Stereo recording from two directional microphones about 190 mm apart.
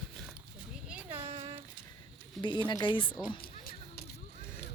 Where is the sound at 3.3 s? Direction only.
50° left (ahead or behind).